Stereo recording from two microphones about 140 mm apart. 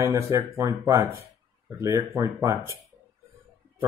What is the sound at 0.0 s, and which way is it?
Speech, 20° right (ahead or behind).